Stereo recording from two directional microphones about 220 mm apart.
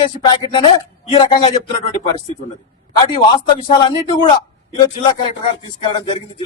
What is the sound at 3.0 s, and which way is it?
Speech, 20° left (ahead or behind).